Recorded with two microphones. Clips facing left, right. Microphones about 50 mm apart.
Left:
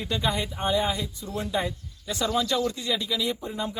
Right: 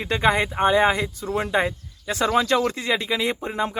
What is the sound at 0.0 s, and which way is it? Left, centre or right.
Speech, right.